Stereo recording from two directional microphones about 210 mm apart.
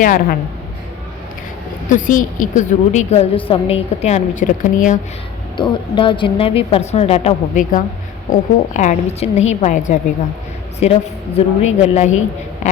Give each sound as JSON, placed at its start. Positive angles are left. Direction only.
{"t": 0.0, "sound": "a woman's voice", "side_deg": 40}
{"t": 1.9, "sound": "a woman's voice", "side_deg": 40}
{"t": 5.5, "sound": "a woman's voice", "side_deg": 20}
{"t": 11.3, "sound": "a woman's voice", "side_deg": 35}